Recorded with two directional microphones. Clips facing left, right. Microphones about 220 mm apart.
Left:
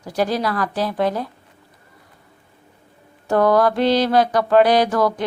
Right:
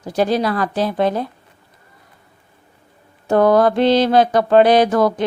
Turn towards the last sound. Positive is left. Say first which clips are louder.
# right 3 dB
turn(degrees=-20)  # may be behind; listen again after turning